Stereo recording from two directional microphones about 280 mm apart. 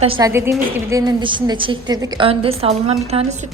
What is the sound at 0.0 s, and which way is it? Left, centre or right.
A woman's voice, centre.